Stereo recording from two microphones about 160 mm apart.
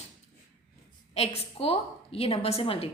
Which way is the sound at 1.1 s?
40° left (ahead or behind).